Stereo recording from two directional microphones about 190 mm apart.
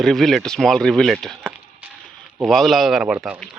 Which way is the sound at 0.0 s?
Centre (ahead or behind).